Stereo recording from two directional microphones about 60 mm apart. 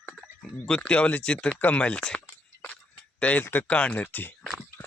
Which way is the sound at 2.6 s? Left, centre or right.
Left.